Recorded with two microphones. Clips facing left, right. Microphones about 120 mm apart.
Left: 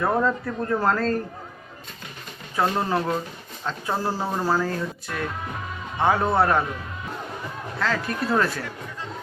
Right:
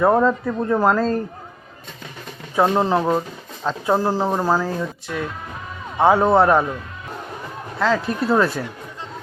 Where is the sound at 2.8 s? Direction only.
25° right (ahead or behind).